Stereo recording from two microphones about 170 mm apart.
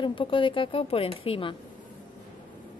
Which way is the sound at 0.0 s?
30° left (ahead or behind).